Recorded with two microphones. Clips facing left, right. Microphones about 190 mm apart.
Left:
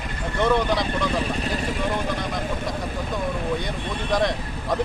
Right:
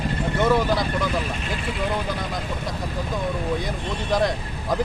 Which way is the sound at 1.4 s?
40° left (ahead or behind).